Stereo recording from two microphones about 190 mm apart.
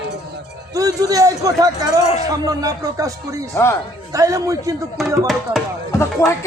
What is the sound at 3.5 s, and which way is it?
Speech, 15° left (ahead or behind).